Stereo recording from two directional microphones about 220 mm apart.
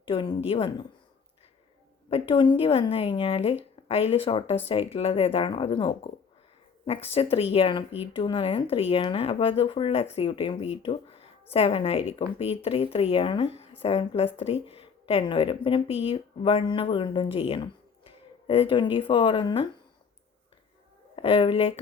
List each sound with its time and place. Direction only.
0.0 s speech: 25° left (ahead or behind)
2.0 s speech: 25° left (ahead or behind)
21.2 s speech: 25° left (ahead or behind)